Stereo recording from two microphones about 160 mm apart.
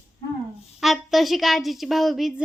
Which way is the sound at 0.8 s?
Centre (ahead or behind).